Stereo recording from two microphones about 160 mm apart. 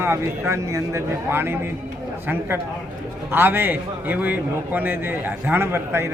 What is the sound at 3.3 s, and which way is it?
Speech, 15° right (ahead or behind).